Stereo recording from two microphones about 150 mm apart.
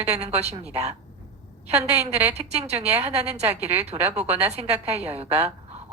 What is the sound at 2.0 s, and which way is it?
Speech, 45° right (ahead or behind).